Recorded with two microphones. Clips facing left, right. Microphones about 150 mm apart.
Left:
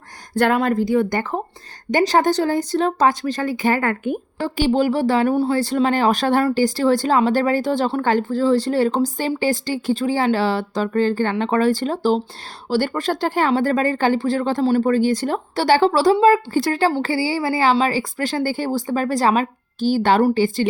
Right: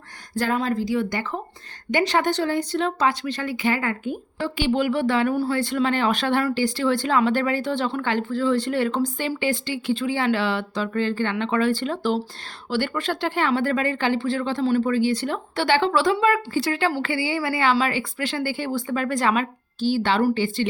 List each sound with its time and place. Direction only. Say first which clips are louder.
0.3 s speech: left 6 dB; 65° left (ahead or behind)
4.4 s a woman's voice: left 4 dB; 40° left (ahead or behind)